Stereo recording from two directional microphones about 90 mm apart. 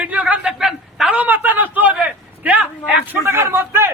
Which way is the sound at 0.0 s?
15° right (ahead or behind).